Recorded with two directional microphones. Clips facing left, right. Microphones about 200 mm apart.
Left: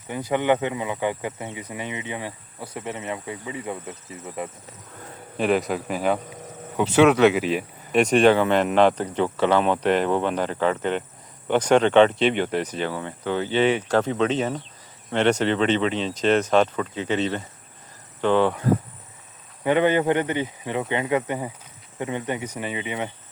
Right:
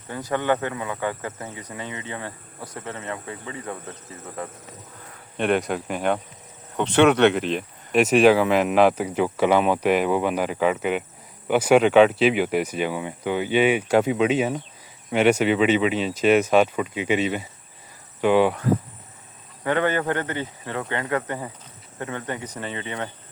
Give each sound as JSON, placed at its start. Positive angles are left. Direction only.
{"t": 0.1, "sound": "speech", "side_deg": 15}
{"t": 5.4, "sound": "speech", "side_deg": 0}
{"t": 8.0, "sound": "speech", "side_deg": -5}
{"t": 19.6, "sound": "speech", "side_deg": 15}